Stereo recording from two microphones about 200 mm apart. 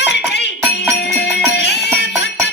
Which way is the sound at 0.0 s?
60° left (ahead or behind).